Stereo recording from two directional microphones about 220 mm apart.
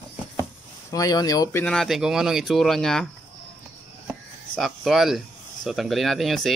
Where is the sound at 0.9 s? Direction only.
15° left (ahead or behind).